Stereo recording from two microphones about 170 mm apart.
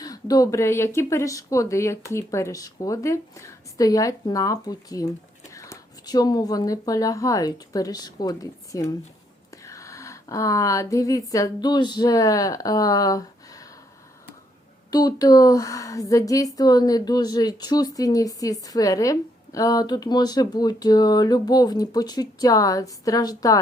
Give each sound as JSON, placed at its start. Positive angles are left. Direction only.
{"t": 0.0, "sound": "a woman's voice", "side_deg": 20}
{"t": 14.8, "sound": "a woman's voice", "side_deg": 25}